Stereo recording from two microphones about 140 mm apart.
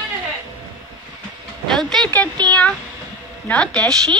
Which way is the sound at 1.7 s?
5° left (ahead or behind).